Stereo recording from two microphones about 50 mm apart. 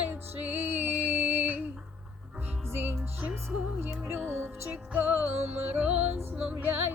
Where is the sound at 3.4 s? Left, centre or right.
Right.